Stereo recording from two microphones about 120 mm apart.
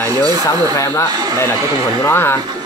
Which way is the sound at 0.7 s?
25° left (ahead or behind).